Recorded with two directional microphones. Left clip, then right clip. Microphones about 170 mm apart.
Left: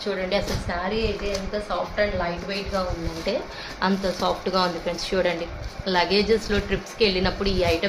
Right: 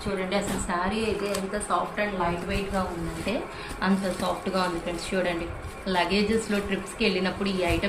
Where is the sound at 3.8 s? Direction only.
50° left (ahead or behind).